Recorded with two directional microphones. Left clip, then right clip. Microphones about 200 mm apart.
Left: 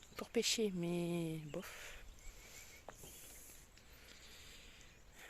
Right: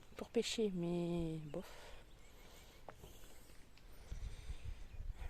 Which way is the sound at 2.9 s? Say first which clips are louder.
Right 1 dB; 10° left (ahead or behind).